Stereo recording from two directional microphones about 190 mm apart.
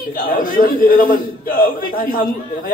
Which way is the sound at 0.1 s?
45° left (ahead or behind).